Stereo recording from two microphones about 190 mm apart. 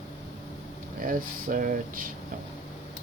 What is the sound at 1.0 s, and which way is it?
Speech, 45° right (ahead or behind).